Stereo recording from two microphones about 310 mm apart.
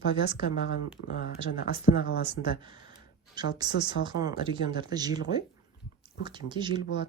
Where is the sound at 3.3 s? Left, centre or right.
Centre.